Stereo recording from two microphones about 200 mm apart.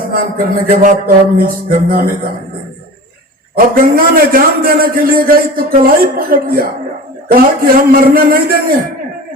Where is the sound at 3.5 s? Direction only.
45° right (ahead or behind).